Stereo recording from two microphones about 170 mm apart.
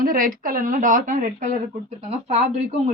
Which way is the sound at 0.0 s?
55° right (ahead or behind).